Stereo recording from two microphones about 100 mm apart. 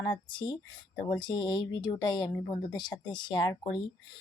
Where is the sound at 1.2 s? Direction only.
50° left (ahead or behind).